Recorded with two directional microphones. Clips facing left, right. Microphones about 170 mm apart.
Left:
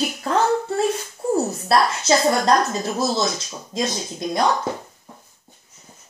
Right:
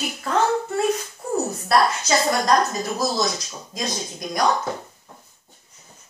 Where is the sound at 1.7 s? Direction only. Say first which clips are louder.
Even; 30° left (ahead or behind).